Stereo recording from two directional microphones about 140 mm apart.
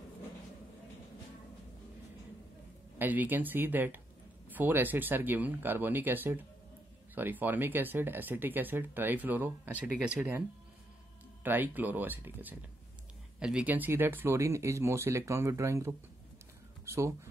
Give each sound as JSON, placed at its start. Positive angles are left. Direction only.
{"t": 3.0, "sound": "speech", "side_deg": -10}
{"t": 11.4, "sound": "speech", "side_deg": -15}